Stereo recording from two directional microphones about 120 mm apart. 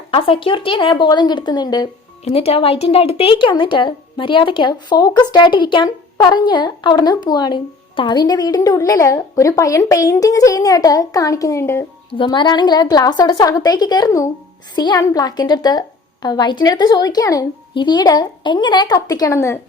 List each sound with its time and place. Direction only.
0.1 s speech: 50° left (ahead or behind)
2.2 s speech: 55° left (ahead or behind); by 11.9 s 20° left (ahead or behind)
12.1 s speech: 40° left (ahead or behind); by 19.5 s 25° left (ahead or behind)